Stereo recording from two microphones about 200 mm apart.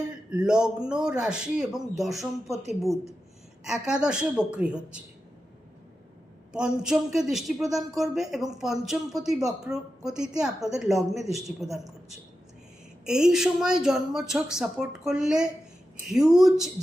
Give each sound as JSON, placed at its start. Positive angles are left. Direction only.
{"t": 0.3, "sound": "a man's voice", "side_deg": -5}
{"t": 3.7, "sound": "a man's voice", "side_deg": -5}
{"t": 6.5, "sound": "a man's voice", "side_deg": -5}